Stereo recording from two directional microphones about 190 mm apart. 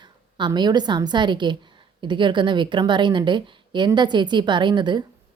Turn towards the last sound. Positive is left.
turn(degrees=-25)  # may be behind; listen again after turning